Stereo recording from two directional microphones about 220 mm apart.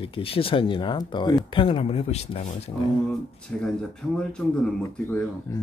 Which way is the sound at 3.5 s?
5° left (ahead or behind).